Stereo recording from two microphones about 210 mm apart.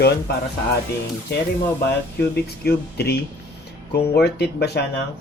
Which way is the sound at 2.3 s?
50° left (ahead or behind).